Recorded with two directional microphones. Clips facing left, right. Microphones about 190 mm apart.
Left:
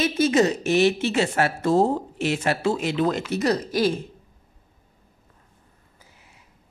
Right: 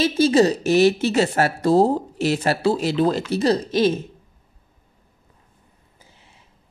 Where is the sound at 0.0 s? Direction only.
30° right (ahead or behind).